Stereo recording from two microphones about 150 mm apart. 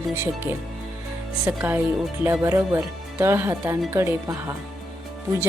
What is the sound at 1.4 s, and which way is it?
A woman's voice, 10° right (ahead or behind).